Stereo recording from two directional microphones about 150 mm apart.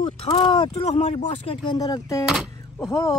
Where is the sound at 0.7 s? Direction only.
50° left (ahead or behind).